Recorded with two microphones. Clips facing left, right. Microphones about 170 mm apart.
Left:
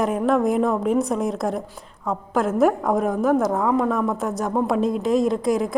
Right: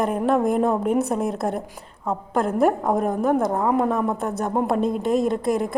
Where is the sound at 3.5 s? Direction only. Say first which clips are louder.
Even; 15° right (ahead or behind).